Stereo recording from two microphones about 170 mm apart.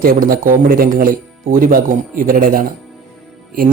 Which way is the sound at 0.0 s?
60° right (ahead or behind).